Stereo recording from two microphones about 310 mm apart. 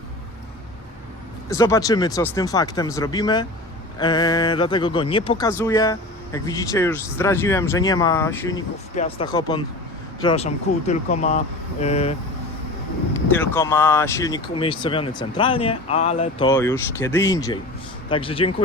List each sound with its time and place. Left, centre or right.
1.5 s speech: centre
13.3 s speech: centre